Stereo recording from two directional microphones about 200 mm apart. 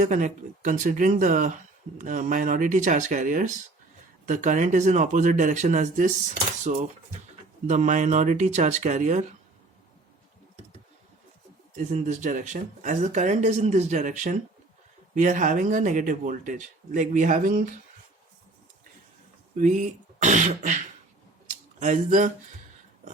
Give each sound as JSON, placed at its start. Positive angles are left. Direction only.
{"t": 0.0, "sound": "speech", "side_deg": -40}
{"t": 11.8, "sound": "speech", "side_deg": -35}
{"t": 19.5, "sound": "speech", "side_deg": -40}